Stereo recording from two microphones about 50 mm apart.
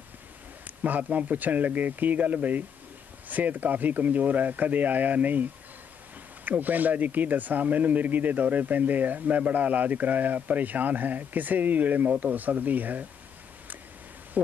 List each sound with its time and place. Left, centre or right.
0.7 s speech: right
14.3 s speech: right